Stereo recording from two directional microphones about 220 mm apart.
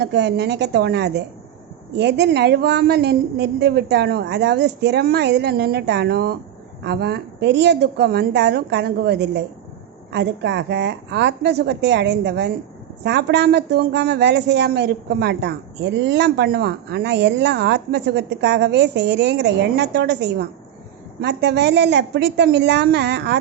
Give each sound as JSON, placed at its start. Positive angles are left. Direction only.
{"t": 0.0, "sound": "a woman's voice", "side_deg": -50}